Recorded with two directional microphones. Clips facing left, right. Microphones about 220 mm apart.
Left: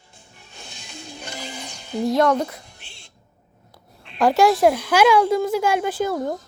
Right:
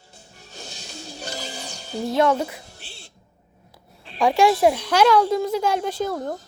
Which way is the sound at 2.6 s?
35° right (ahead or behind).